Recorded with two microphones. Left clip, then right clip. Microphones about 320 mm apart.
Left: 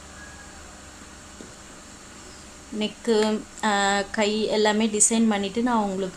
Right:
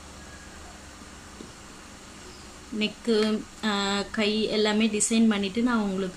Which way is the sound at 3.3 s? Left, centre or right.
Centre.